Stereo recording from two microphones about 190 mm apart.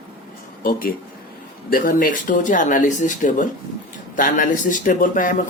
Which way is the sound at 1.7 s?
45° left (ahead or behind).